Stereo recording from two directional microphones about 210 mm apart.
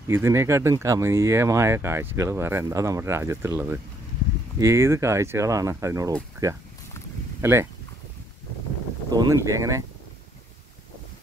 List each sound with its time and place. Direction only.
0.1 s speech: 15° right (ahead or behind)
9.1 s speech: 15° right (ahead or behind)